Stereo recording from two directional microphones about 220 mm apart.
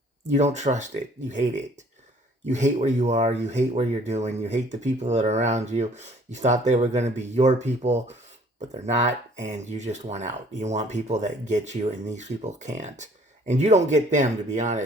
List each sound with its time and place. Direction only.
0.3 s speech: 30° right (ahead or behind)